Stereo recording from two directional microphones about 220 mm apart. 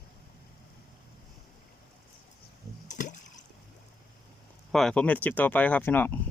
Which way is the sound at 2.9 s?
35° left (ahead or behind).